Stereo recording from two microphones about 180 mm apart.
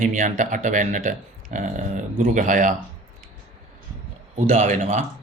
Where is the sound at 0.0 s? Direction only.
45° right (ahead or behind).